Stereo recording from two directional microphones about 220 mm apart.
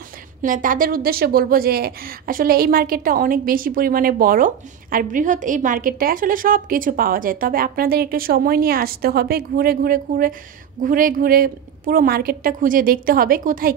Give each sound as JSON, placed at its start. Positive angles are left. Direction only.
{"t": 0.4, "sound": "a woman's voice", "side_deg": -35}